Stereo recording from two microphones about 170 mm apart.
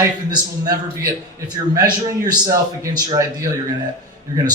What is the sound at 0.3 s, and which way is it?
A man's voice, 25° right (ahead or behind).